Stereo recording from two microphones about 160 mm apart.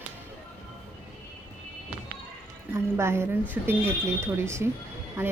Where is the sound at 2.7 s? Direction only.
15° right (ahead or behind).